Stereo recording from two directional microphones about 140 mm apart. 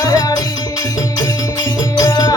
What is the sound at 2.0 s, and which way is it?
Music, 25° left (ahead or behind).